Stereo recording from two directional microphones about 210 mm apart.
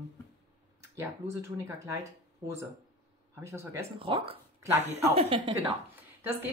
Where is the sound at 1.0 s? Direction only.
10° right (ahead or behind).